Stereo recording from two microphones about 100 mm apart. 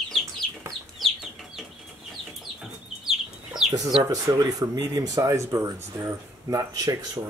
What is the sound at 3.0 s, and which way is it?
Chicken, 5° right (ahead or behind).